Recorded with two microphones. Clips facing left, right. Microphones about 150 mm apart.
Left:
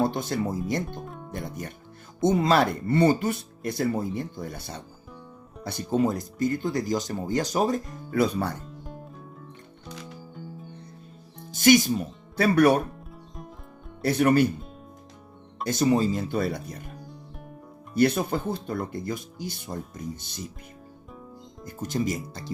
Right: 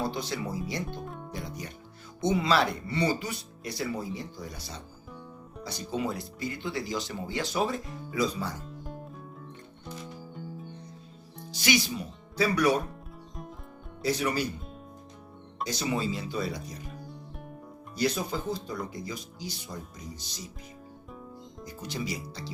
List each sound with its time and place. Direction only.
0.0 s speech: 50° left (ahead or behind)
1.0 s music: centre (ahead or behind)
1.3 s music: 50° left (ahead or behind)
2.2 s speech: 45° left (ahead or behind)
8.1 s speech: 60° left (ahead or behind)
8.6 s music: centre (ahead or behind)
11.5 s speech: 50° left (ahead or behind)
14.0 s speech: 55° left (ahead or behind)
15.6 s speech: 50° left (ahead or behind)
17.9 s speech: 55° left (ahead or behind)
21.6 s speech: 50° left (ahead or behind)